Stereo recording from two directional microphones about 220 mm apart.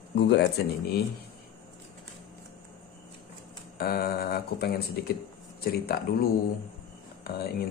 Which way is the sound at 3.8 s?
40° left (ahead or behind).